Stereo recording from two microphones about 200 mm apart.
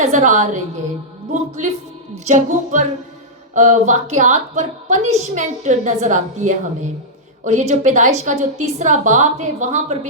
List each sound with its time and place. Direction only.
0.0 s a woman's voice: 35° right (ahead or behind)